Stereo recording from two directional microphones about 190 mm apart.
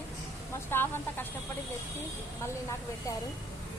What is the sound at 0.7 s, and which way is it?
Speech, 10° left (ahead or behind).